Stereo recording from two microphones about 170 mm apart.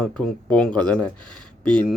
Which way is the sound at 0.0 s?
5° left (ahead or behind).